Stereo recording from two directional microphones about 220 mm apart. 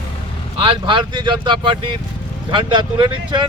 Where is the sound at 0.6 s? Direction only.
20° right (ahead or behind).